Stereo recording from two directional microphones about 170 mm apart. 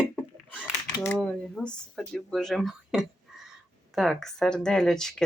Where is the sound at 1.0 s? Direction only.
5° left (ahead or behind).